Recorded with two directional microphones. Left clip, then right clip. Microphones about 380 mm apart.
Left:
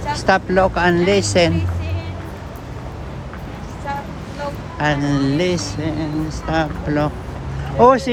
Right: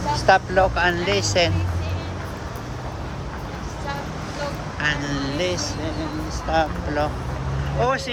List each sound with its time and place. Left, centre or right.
0.1 s speech: centre
4.8 s speech: centre